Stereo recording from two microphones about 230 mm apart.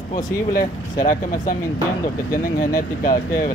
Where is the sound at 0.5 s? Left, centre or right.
Left.